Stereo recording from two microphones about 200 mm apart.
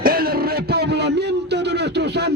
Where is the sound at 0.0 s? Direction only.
50° right (ahead or behind).